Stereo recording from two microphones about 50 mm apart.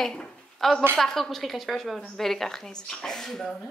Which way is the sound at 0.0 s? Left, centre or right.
Centre.